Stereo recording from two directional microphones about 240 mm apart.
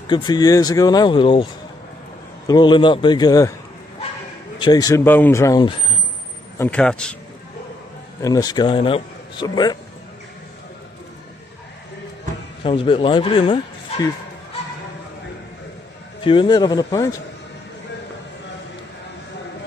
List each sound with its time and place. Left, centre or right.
0.1 s a man's voice: centre
4.6 s a man's voice: centre
6.6 s a man's voice: centre
8.2 s a man's voice: centre
12.6 s speech: left
16.3 s a man's voice: centre